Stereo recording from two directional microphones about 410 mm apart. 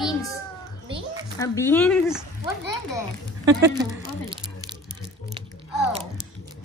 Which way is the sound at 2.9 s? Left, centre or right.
Centre.